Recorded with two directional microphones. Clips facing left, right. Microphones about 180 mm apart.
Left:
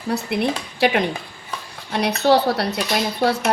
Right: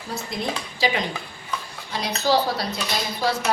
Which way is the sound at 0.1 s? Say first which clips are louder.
Left 7 dB; 65° left (ahead or behind).